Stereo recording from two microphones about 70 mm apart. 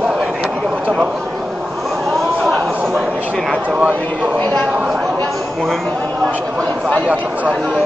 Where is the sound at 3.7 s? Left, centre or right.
Centre.